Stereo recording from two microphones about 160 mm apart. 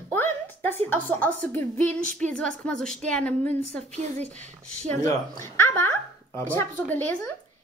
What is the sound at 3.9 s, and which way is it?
Speech, 45° right (ahead or behind).